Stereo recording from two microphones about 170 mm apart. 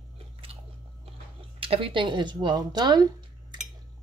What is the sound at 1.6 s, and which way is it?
Speech, 30° right (ahead or behind).